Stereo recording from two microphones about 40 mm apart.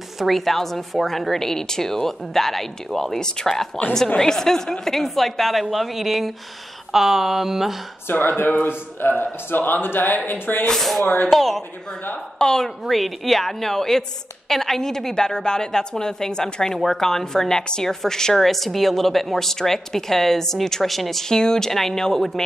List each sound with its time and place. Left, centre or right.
0.2 s a woman's voice: centre
3.2 s a woman's voice: centre
8.1 s speech: left
10.7 s a woman's voice: centre
12.4 s a woman's voice: centre
12.6 s a woman's voice: centre
16.7 s a woman's voice: centre
21.3 s a woman's voice: centre